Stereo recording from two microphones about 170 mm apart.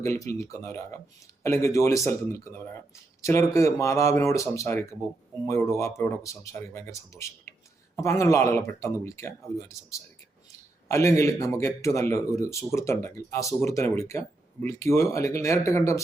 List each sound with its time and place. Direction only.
0.0 s a man's voice: 15° left (ahead or behind)